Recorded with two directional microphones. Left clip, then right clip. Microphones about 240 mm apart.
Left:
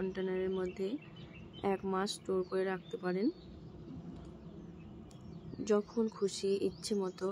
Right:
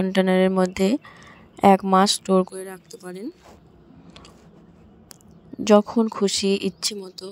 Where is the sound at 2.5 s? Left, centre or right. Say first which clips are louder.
Even; centre.